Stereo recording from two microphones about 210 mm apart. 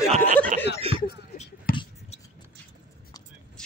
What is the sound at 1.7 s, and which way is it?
Beatboxing, 45° left (ahead or behind).